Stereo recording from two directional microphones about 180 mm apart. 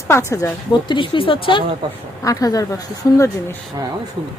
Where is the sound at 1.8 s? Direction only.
25° right (ahead or behind).